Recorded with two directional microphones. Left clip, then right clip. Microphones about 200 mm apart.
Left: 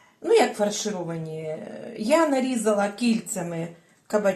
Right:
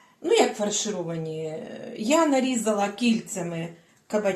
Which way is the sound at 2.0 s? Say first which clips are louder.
Left 1 dB; 25° left (ahead or behind).